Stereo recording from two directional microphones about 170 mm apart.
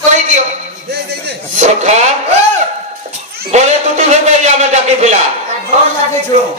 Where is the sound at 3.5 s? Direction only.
45° right (ahead or behind).